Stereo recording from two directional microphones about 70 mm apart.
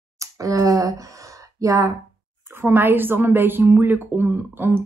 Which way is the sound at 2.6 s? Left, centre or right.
Right.